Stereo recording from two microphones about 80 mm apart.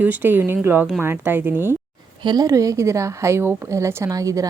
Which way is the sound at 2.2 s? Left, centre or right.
Right.